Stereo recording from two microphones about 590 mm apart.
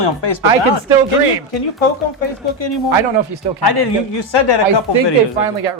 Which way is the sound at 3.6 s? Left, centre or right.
Left.